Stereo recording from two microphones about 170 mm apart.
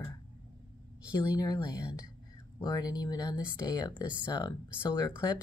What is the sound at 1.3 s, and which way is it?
A woman's voice, 20° left (ahead or behind).